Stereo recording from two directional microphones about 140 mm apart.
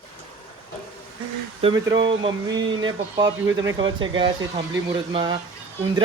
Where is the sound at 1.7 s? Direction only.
30° right (ahead or behind).